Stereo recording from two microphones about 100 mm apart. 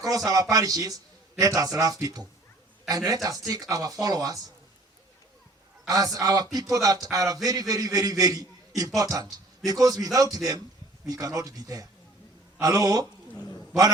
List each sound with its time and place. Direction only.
0.3 s speech: 35° right (ahead or behind)
5.9 s speech: 35° right (ahead or behind)